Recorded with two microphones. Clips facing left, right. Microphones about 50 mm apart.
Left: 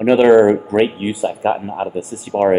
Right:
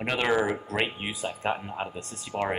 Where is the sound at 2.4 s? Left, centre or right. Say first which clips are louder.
Left 16 dB; left.